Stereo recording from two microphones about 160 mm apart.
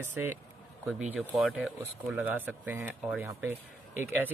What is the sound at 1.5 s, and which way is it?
Speech, 5° right (ahead or behind).